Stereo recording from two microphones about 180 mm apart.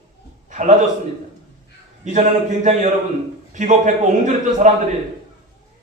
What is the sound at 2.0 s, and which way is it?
Speech, 40° right (ahead or behind).